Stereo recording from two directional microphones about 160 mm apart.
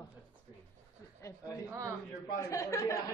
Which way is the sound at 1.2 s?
20° left (ahead or behind).